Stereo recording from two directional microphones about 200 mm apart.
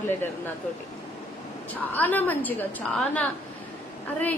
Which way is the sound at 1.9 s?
10° left (ahead or behind).